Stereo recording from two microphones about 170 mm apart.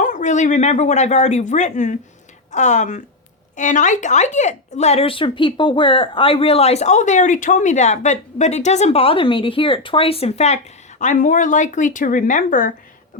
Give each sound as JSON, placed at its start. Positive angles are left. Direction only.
{"t": 0.0, "sound": "speech", "side_deg": 45}